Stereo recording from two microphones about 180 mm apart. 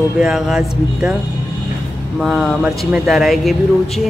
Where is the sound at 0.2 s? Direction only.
5° right (ahead or behind).